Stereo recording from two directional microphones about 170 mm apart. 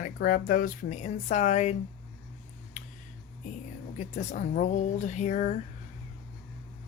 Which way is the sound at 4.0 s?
45° left (ahead or behind).